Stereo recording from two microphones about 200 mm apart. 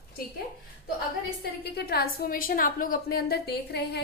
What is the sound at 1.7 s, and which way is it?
A woman's voice, 50° left (ahead or behind).